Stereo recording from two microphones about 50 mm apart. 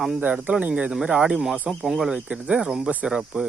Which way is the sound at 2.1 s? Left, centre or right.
Centre.